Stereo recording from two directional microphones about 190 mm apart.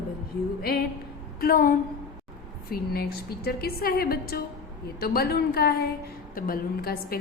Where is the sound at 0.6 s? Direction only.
50° left (ahead or behind).